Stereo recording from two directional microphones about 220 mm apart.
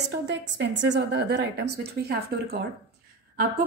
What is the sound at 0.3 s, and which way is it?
A woman's voice, 50° right (ahead or behind).